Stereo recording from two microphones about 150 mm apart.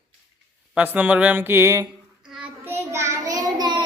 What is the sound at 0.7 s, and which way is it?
Speech, 10° right (ahead or behind).